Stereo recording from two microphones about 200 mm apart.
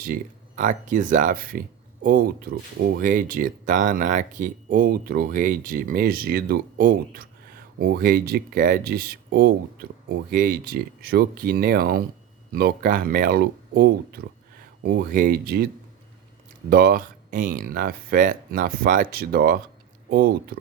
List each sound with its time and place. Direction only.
0.0 s speech: 40° right (ahead or behind)